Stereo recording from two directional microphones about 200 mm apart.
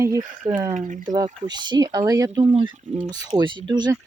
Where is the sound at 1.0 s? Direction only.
20° right (ahead or behind).